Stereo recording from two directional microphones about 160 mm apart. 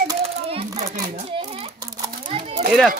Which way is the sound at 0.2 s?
35° right (ahead or behind).